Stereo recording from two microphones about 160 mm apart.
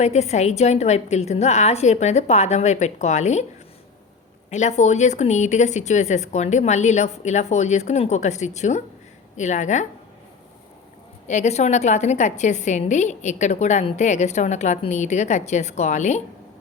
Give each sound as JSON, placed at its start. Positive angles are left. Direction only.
{"t": 0.0, "sound": "a woman's voice", "side_deg": 45}
{"t": 4.5, "sound": "a woman's voice", "side_deg": 45}
{"t": 11.3, "sound": "a woman's voice", "side_deg": 45}